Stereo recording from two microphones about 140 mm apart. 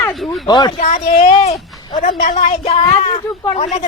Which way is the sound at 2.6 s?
45° left (ahead or behind).